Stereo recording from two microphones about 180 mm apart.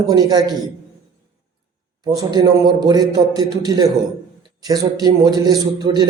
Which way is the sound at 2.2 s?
25° right (ahead or behind).